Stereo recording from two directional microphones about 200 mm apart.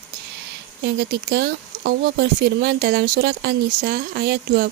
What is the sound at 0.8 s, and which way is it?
Speech, 55° right (ahead or behind).